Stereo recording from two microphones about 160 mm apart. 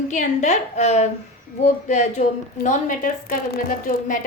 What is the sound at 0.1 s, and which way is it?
A woman's voice, 50° left (ahead or behind).